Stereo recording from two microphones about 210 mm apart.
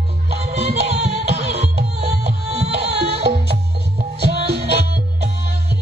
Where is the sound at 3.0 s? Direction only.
50° right (ahead or behind).